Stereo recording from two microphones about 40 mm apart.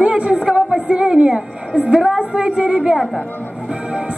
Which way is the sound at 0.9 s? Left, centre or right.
Right.